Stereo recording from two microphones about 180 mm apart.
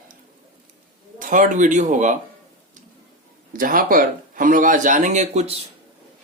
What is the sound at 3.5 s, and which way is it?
Speech, 50° right (ahead or behind).